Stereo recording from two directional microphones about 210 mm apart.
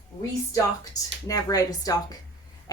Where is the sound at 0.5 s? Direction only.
15° left (ahead or behind).